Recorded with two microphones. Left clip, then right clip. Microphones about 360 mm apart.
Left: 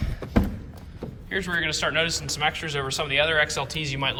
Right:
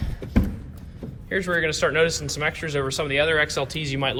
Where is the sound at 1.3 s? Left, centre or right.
Centre.